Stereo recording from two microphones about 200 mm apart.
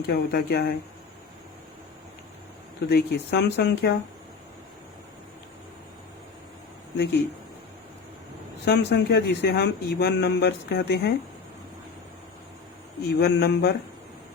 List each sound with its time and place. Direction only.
0.1 s speech: 55° left (ahead or behind)
2.9 s speech: 55° left (ahead or behind)
6.9 s speech: 60° left (ahead or behind)
8.6 s speech: 55° left (ahead or behind)
13.1 s speech: 55° left (ahead or behind)